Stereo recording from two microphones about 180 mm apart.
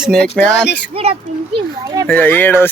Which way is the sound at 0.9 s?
35° right (ahead or behind).